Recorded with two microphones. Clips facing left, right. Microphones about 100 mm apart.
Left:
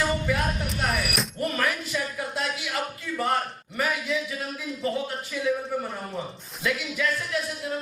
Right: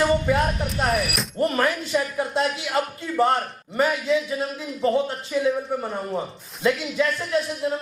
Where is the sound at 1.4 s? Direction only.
30° right (ahead or behind).